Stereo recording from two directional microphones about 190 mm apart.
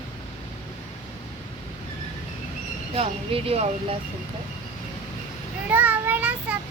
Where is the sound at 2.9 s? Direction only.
30° right (ahead or behind).